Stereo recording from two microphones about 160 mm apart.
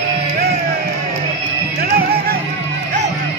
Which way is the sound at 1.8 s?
75° right (ahead or behind).